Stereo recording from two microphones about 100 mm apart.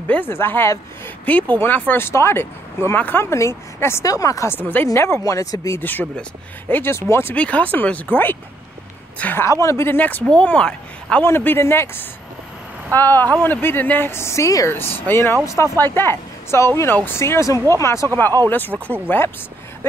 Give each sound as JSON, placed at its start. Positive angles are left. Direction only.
{"t": 0.1, "sound": "speech", "side_deg": 20}
{"t": 4.6, "sound": "speech", "side_deg": 20}
{"t": 5.8, "sound": "speech", "side_deg": 20}
{"t": 7.3, "sound": "speech", "side_deg": 15}
{"t": 9.5, "sound": "speech", "side_deg": 30}
{"t": 11.2, "sound": "speech", "side_deg": 25}
{"t": 18.7, "sound": "speech", "side_deg": 5}
{"t": 19.0, "sound": "speech", "side_deg": 20}